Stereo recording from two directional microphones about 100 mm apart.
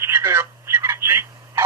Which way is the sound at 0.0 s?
25° right (ahead or behind).